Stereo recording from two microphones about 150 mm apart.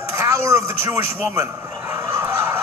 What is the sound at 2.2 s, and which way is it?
Fowl, 20° right (ahead or behind).